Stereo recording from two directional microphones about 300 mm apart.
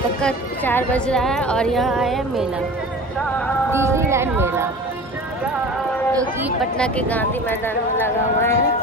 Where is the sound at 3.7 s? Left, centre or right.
Centre.